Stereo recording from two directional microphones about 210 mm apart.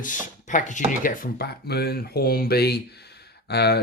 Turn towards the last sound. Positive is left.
turn(degrees=50)  # may be behind; listen again after turning